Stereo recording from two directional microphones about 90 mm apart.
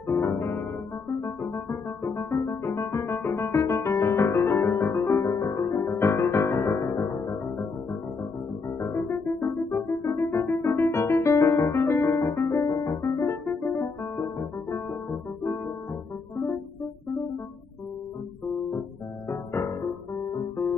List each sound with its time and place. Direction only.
0.0 s music: 30° left (ahead or behind)
8.6 s music: 30° left (ahead or behind)
10.3 s piano: 25° left (ahead or behind)
11.1 s music: 35° left (ahead or behind)
12.6 s piano: 35° left (ahead or behind)
13.5 s music: 20° left (ahead or behind)
19.2 s music: 25° left (ahead or behind)